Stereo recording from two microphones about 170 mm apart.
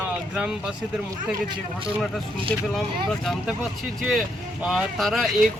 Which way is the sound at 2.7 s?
Centre (ahead or behind).